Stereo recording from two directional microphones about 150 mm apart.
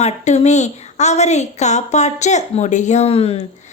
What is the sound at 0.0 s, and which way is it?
A woman's voice, 50° left (ahead or behind).